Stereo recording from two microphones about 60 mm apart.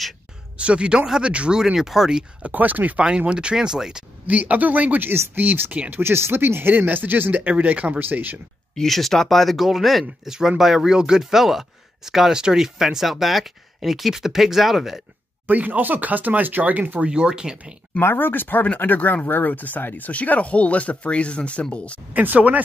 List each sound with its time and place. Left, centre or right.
0.6 s speech: centre
2.4 s speech: right
3.0 s speech: centre
4.3 s speech: right
5.1 s speech: right
5.4 s speech: right
8.7 s speech: centre
15.4 s speech: right
17.0 s speech: centre
18.0 s speech: left; by 22.0 s centre
22.1 s speech: right